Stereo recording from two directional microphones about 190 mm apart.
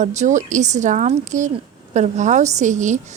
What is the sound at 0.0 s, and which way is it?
A woman's voice, 40° right (ahead or behind).